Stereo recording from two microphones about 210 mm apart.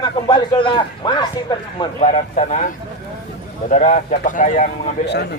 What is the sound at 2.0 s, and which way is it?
Speech, 35° left (ahead or behind).